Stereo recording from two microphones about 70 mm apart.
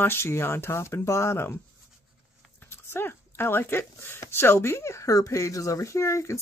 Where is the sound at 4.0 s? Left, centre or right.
Left.